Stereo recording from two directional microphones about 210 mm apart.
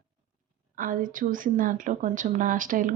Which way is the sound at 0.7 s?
40° right (ahead or behind).